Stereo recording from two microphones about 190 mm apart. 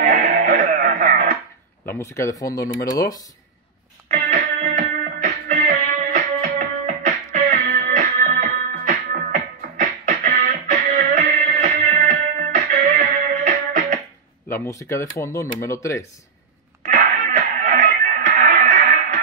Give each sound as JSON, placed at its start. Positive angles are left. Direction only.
{"t": 0.0, "sound": "music", "side_deg": -50}
{"t": 1.9, "sound": "speech", "side_deg": 15}
{"t": 4.1, "sound": "music", "side_deg": -45}
{"t": 7.1, "sound": "music", "side_deg": -35}
{"t": 7.8, "sound": "music", "side_deg": -50}
{"t": 14.5, "sound": "speech", "side_deg": 15}
{"t": 16.8, "sound": "music", "side_deg": -50}